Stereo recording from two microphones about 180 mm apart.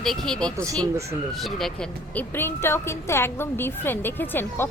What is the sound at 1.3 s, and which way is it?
A woman's voice, centre (ahead or behind).